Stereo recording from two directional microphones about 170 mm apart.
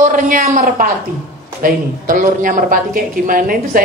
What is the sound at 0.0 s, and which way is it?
A woman's voice, 50° right (ahead or behind).